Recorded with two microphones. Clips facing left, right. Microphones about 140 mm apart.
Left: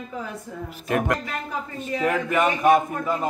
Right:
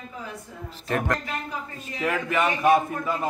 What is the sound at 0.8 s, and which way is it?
A man's voice, 10° left (ahead or behind).